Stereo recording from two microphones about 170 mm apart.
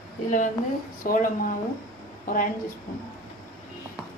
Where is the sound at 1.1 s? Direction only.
50° left (ahead or behind).